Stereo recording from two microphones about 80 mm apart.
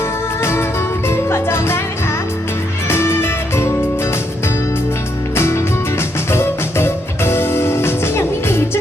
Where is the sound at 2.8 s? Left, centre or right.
Left.